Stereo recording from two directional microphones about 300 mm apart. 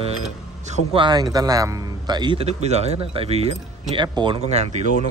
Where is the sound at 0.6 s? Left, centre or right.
Centre.